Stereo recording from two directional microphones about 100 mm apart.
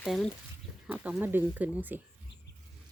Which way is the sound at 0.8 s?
15° right (ahead or behind).